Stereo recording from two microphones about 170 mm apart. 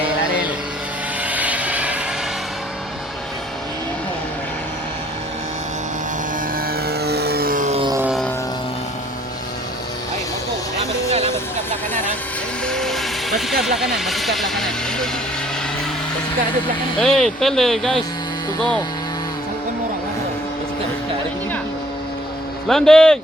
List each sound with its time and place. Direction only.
1.2 s vehicle: 10° right (ahead or behind)
6.6 s vehicle: 65° right (ahead or behind)
7.7 s music: 30° right (ahead or behind)
12.6 s vehicle: 5° left (ahead or behind)
17.0 s speech: centre (ahead or behind)
22.7 s speech: 5° left (ahead or behind)